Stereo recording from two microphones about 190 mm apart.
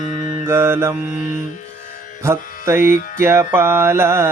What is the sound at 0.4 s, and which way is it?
Speech, 15° right (ahead or behind).